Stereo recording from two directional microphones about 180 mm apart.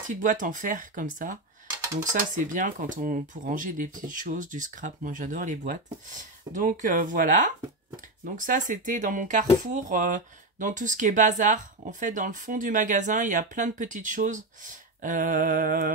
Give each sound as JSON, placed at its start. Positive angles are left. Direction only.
{"t": 0.1, "sound": "speech", "side_deg": -45}